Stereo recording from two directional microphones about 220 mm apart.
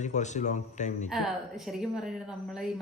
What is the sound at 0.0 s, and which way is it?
Speech, 35° left (ahead or behind).